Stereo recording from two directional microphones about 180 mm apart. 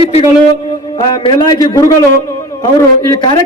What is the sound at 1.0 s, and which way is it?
Speech, 25° left (ahead or behind).